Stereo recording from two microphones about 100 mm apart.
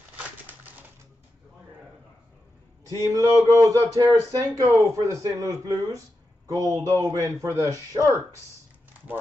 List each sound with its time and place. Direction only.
3.2 s speech: 35° right (ahead or behind)